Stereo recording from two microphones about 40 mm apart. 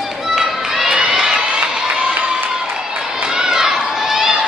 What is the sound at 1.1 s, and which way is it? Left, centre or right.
Crowd, centre.